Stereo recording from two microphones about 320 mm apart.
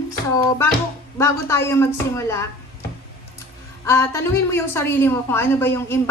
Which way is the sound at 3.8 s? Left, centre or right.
Centre.